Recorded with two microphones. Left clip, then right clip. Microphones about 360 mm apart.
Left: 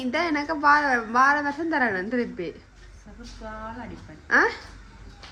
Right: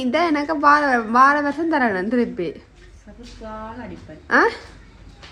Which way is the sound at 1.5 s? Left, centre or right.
Right.